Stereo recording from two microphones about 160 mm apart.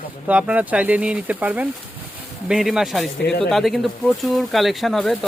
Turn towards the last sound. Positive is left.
turn(degrees=0)  # may be behind; listen again after turning